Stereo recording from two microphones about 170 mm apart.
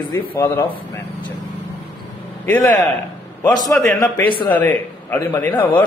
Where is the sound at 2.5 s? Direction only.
15° left (ahead or behind).